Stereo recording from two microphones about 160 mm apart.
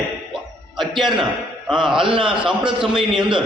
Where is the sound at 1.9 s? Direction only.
30° right (ahead or behind).